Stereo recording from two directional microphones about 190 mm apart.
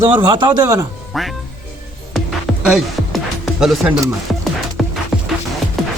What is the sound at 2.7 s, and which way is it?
Music, centre (ahead or behind).